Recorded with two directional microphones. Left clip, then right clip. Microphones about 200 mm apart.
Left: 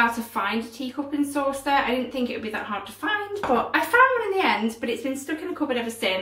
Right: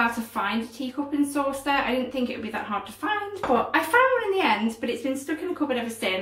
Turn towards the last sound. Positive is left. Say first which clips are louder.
# left 1 dB
turn(degrees=0)  # may be behind; listen again after turning